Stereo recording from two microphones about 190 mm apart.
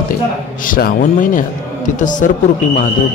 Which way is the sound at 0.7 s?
45° left (ahead or behind).